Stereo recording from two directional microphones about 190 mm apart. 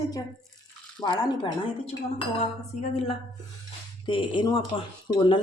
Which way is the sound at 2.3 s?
35° left (ahead or behind).